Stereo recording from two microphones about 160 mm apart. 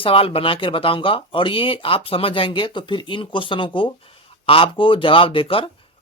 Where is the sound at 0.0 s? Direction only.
35° left (ahead or behind).